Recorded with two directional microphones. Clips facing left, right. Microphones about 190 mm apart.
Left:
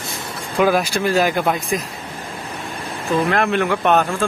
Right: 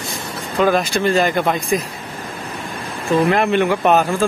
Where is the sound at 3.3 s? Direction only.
Centre (ahead or behind).